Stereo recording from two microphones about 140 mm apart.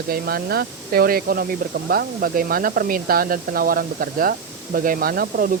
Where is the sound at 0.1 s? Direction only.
90° right.